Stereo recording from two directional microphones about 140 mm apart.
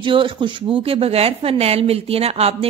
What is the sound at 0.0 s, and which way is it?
Speech, 40° right (ahead or behind).